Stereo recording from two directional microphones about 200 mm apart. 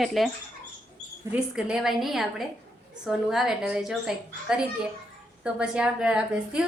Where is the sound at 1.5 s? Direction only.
5° right (ahead or behind).